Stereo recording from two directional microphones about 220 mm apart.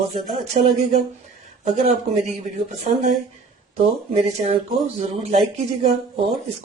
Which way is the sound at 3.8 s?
30° right (ahead or behind).